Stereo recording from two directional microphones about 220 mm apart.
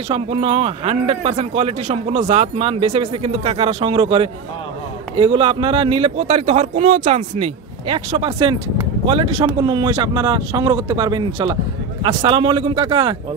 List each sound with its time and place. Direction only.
0.1 s speech: 25° right (ahead or behind)